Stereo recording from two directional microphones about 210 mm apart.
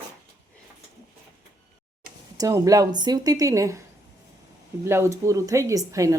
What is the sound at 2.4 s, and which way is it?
Speech, 15° right (ahead or behind).